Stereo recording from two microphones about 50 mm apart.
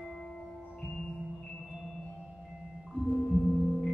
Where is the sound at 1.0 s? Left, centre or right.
Centre.